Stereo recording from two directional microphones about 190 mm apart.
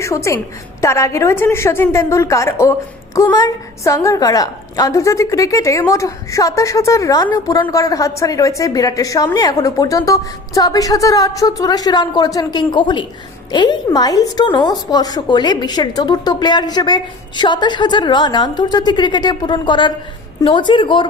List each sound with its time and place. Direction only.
0.0 s a woman's voice: 15° left (ahead or behind)